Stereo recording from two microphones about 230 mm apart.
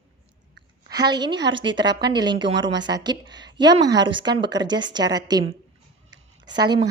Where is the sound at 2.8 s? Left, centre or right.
Centre.